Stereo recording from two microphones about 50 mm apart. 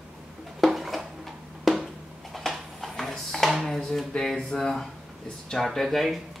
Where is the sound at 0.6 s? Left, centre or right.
Centre.